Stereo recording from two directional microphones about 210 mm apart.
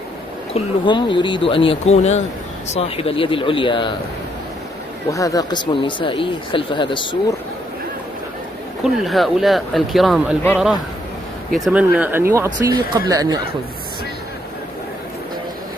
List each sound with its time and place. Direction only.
0.6 s speech: 25° left (ahead or behind)
5.1 s speech: 15° left (ahead or behind)
8.8 s speech: centre (ahead or behind)
11.5 s speech: 5° right (ahead or behind)